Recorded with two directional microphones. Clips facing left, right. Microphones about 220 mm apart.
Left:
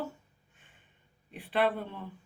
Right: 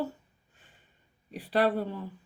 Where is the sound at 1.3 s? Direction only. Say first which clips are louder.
Right 3 dB; 40° right (ahead or behind).